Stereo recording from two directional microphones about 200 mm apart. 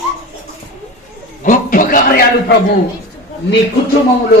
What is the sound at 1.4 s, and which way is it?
Speech, 40° left (ahead or behind).